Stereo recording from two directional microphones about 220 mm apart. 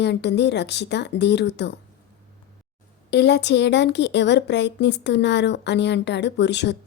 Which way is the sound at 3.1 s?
50° left (ahead or behind).